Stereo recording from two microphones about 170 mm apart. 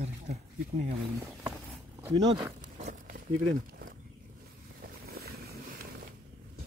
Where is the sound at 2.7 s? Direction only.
45° right (ahead or behind).